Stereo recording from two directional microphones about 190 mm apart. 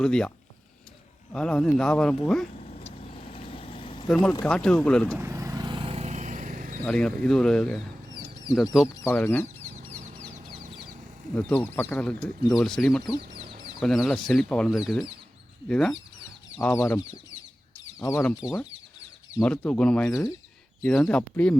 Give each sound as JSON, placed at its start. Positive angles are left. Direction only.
{"t": 0.0, "sound": "speech", "side_deg": 5}
{"t": 2.6, "sound": "vehicle", "side_deg": 35}
{"t": 4.1, "sound": "speech", "side_deg": 5}
{"t": 5.1, "sound": "vehicle", "side_deg": -15}
{"t": 6.8, "sound": "speech", "side_deg": 5}
{"t": 9.0, "sound": "speech", "side_deg": 15}
{"t": 10.3, "sound": "chicken", "side_deg": -50}
{"t": 11.3, "sound": "speech", "side_deg": 10}
{"t": 16.6, "sound": "speech", "side_deg": 15}
{"t": 18.0, "sound": "speech", "side_deg": 10}
{"t": 19.4, "sound": "speech", "side_deg": 5}
{"t": 20.1, "sound": "speech", "side_deg": 15}
{"t": 20.8, "sound": "speech", "side_deg": 5}